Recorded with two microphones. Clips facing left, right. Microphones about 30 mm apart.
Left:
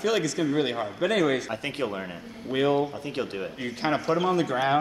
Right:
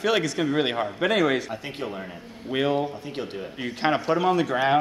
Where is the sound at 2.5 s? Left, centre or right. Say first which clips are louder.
Even; centre.